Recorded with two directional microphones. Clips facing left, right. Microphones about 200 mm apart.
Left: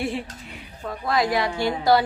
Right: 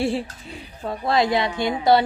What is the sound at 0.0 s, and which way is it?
A woman's voice, 30° right (ahead or behind).